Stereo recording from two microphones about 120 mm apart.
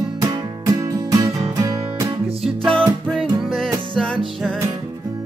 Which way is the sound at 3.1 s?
Centre (ahead or behind).